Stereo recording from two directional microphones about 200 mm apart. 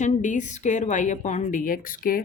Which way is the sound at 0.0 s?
40° left (ahead or behind).